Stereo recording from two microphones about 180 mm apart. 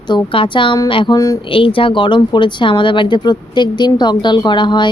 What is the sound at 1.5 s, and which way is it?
Speech, 30° left (ahead or behind).